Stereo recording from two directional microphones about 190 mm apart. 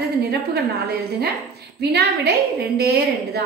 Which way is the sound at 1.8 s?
60° right (ahead or behind).